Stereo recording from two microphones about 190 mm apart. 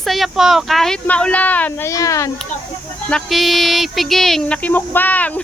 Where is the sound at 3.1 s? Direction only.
Centre (ahead or behind).